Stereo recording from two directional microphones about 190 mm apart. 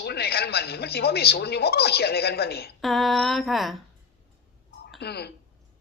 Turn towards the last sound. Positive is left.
turn(degrees=60)  # may be behind; listen again after turning